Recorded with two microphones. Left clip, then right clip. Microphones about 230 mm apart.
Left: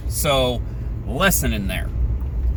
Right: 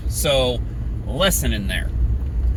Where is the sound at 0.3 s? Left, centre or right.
Centre.